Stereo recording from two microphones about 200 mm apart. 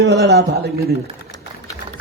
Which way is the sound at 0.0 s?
55° right (ahead or behind).